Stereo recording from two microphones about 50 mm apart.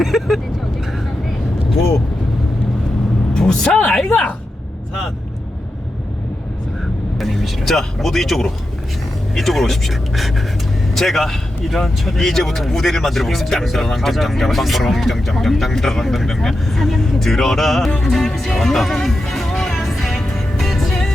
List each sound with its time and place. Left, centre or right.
0.0 s vehicle: centre
3.3 s vehicle: centre
4.1 s a sound: left
7.2 s speech: centre
17.9 s music: centre